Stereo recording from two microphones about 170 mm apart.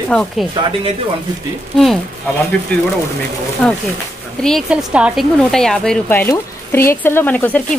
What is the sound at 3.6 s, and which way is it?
A woman's voice, 5° left (ahead or behind).